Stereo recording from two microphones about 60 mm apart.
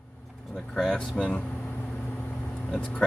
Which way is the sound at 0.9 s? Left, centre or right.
Centre.